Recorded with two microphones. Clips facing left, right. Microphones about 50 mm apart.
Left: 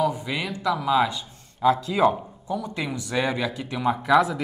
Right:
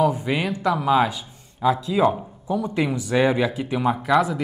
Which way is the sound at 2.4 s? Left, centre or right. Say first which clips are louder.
Right 6 dB; centre.